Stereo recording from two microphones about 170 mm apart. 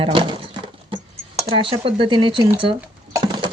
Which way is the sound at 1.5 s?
30° right (ahead or behind).